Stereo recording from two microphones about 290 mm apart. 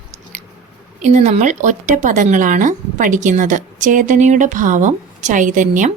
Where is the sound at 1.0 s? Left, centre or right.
Right.